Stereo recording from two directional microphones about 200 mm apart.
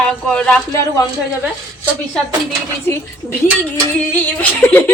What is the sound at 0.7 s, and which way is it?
Speech, 15° left (ahead or behind).